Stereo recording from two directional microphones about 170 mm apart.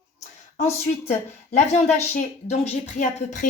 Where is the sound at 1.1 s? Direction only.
40° left (ahead or behind).